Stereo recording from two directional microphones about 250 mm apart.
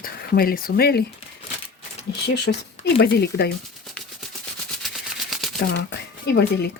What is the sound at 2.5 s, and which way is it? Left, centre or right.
Speech, left.